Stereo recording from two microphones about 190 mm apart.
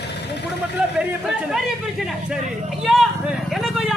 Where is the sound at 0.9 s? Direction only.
Centre (ahead or behind).